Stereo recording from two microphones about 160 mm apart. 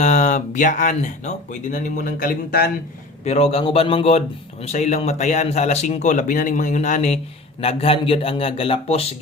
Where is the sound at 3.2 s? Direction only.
40° left (ahead or behind).